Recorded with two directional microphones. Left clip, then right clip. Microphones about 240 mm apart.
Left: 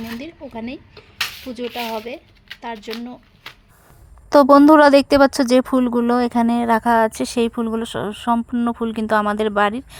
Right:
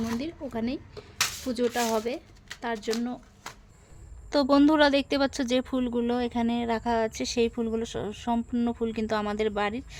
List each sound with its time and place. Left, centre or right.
0.0 s speech: centre
4.3 s speech: left